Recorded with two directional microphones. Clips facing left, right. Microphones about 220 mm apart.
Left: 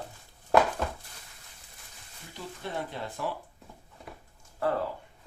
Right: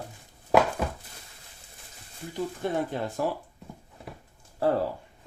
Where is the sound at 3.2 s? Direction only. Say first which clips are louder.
Right 5 dB; 45° right (ahead or behind).